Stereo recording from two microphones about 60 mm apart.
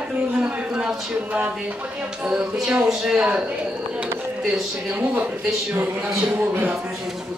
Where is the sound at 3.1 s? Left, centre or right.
Right.